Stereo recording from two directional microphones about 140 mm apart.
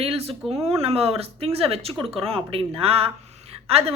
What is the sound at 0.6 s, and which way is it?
A woman's voice, 45° right (ahead or behind).